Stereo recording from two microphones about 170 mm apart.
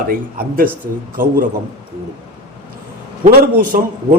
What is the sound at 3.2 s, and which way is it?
Speech, 55° right (ahead or behind).